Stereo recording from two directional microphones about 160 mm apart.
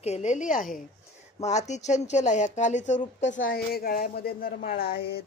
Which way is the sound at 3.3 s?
65° left (ahead or behind).